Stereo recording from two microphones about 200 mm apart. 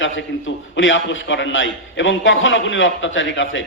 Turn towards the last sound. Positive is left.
turn(degrees=70)  # may be behind; listen again after turning